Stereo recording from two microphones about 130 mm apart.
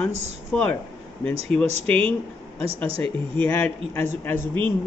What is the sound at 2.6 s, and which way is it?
Speech, 45° right (ahead or behind).